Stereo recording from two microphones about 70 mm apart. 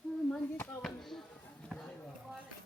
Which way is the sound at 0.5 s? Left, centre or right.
Left.